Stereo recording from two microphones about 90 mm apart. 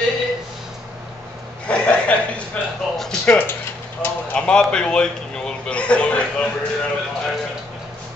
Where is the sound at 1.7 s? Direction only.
15° left (ahead or behind).